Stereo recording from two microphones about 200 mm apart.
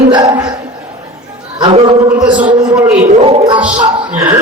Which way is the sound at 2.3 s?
25° right (ahead or behind).